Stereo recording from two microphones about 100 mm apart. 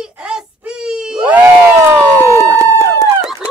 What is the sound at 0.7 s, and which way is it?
Wail, 5° right (ahead or behind).